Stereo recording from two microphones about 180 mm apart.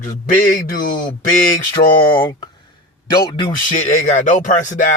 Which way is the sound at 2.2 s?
20° left (ahead or behind).